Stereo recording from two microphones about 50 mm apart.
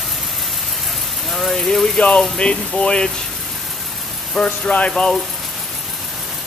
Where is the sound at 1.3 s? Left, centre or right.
Centre.